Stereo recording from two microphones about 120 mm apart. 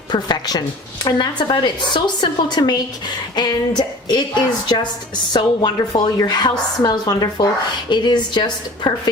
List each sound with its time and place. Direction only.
0.1 s a woman's voice: 35° left (ahead or behind)